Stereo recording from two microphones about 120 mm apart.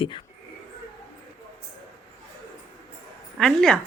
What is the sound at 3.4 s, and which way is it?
Speech, 5° left (ahead or behind).